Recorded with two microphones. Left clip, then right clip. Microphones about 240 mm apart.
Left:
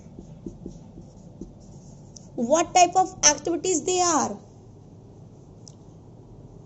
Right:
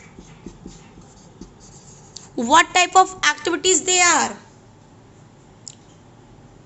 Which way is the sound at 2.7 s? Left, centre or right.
Right.